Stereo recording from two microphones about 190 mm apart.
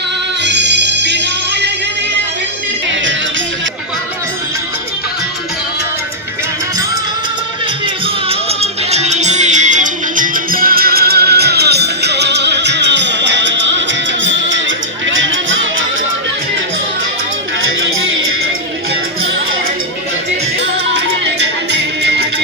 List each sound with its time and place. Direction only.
0.4 s music: 65° right (ahead or behind)
2.9 s music: 75° right (ahead or behind)
8.0 s music: 30° right (ahead or behind); by 15.9 s 85° right
17.7 s music: 90° right
21.7 s music: 60° right (ahead or behind)